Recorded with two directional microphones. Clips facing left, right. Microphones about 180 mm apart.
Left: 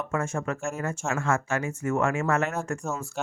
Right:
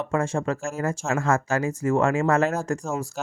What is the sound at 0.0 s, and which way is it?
Speech, 30° right (ahead or behind).